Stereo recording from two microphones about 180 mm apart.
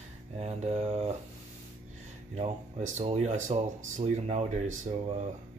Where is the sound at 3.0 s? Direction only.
35° right (ahead or behind).